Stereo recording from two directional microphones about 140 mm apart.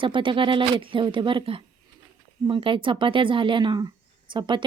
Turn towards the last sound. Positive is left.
turn(degrees=-35)  # may be behind; listen again after turning